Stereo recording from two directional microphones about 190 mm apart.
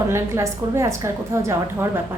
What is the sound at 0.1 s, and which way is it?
A woman's voice, 15° right (ahead or behind).